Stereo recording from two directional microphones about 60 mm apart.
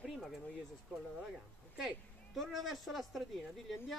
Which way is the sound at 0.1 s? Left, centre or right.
Centre.